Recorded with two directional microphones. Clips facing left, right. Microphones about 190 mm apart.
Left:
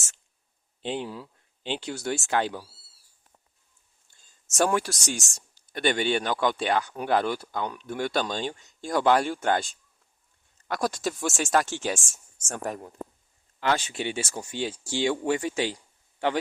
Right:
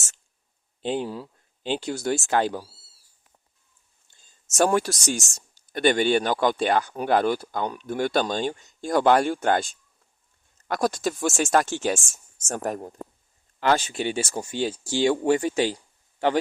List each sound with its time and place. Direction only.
0.8 s speech: 40° right (ahead or behind)
4.1 s a sound: 20° right (ahead or behind)
4.5 s speech: 40° right (ahead or behind)
10.7 s speech: 45° right (ahead or behind)